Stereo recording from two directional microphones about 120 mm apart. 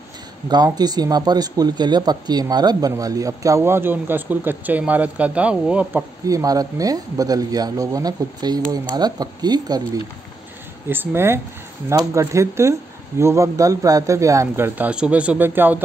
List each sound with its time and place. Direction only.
0.7 s speech: 35° right (ahead or behind); by 6.0 s 10° right (ahead or behind)
6.2 s speech: 30° right (ahead or behind)
10.9 s speech: 20° right (ahead or behind)